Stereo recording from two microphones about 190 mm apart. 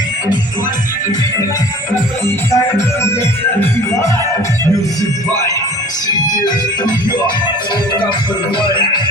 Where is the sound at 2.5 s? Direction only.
15° left (ahead or behind).